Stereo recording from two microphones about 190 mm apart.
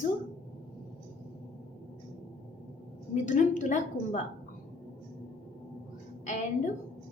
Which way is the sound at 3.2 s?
40° left (ahead or behind).